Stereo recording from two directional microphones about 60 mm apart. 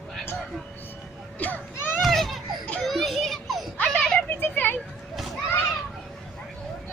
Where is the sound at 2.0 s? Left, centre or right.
Centre.